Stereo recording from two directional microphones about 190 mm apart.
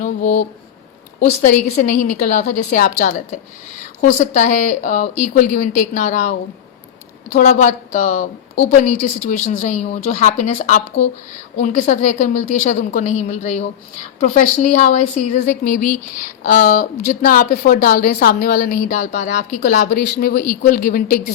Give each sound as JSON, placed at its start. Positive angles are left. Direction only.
{"t": 0.0, "sound": "speech", "side_deg": 35}
{"t": 1.7, "sound": "a woman's voice", "side_deg": 45}
{"t": 7.3, "sound": "a woman's voice", "side_deg": 40}